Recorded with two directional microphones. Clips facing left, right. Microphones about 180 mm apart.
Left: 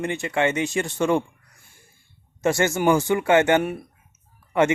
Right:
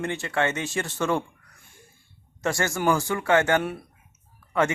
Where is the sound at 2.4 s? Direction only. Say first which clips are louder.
Left 4 dB; 20° left (ahead or behind).